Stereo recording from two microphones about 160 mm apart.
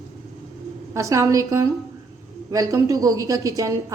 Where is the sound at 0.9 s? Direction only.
20° right (ahead or behind).